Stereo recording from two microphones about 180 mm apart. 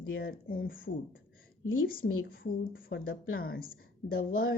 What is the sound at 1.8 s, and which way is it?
A woman's voice, 55° left (ahead or behind).